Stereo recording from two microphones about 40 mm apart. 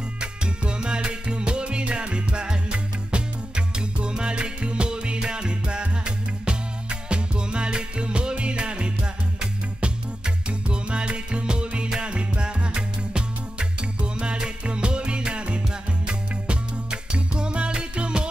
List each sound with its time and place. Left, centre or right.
0.2 s music: right